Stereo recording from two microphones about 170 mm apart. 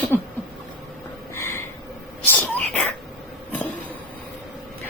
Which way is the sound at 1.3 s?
15° left (ahead or behind).